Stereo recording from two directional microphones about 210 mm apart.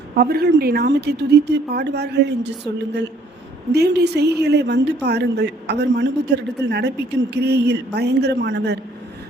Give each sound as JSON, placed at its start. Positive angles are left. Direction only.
{"t": 0.2, "sound": "a woman's voice", "side_deg": -50}
{"t": 3.7, "sound": "a woman's voice", "side_deg": -50}